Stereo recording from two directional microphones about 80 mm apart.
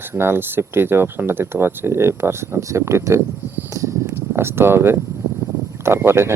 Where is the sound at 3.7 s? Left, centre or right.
Right.